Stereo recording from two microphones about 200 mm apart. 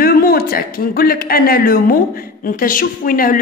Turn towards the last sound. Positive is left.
turn(degrees=45)  # may be behind; listen again after turning